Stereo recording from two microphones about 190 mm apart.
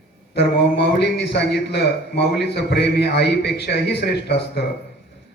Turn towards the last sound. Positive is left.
turn(degrees=60)  # may be behind; listen again after turning